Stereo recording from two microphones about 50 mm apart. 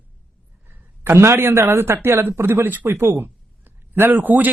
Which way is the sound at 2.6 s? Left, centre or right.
Right.